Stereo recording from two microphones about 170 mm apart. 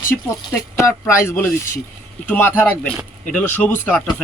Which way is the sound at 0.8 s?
15° left (ahead or behind).